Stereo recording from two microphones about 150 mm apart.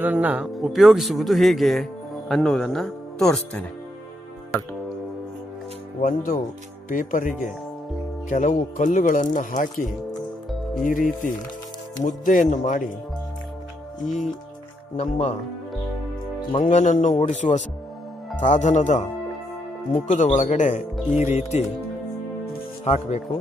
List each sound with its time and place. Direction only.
0.0 s speech: 10° right (ahead or behind)
5.9 s speech: 60° left (ahead or behind)
10.8 s speech: 65° left (ahead or behind)
14.0 s speech: centre (ahead or behind)
15.0 s speech: 50° left (ahead or behind)
16.6 s speech: 55° left (ahead or behind)
22.8 s speech: 45° left (ahead or behind)